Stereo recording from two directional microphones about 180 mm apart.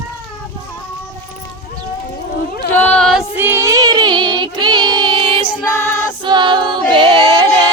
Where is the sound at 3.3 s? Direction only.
10° right (ahead or behind); by 5.4 s 30° right (ahead or behind).